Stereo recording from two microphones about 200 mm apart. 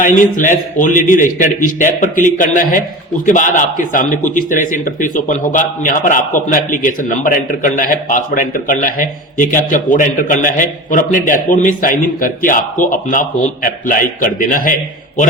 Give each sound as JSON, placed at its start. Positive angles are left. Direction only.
{"t": 0.0, "sound": "a man's voice", "side_deg": 40}